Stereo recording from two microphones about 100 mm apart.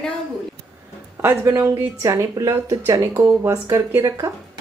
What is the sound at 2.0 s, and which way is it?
Speech, 35° right (ahead or behind).